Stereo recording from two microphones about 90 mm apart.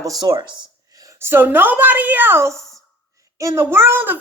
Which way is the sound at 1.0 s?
25° right (ahead or behind).